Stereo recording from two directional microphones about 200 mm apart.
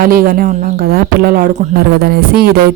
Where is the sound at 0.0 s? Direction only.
45° right (ahead or behind).